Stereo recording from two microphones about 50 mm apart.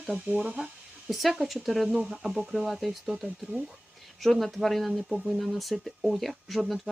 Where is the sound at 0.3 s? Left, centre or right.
Right.